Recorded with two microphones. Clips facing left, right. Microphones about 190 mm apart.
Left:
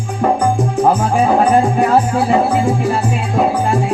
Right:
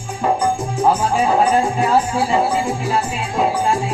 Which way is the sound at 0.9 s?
55° left (ahead or behind).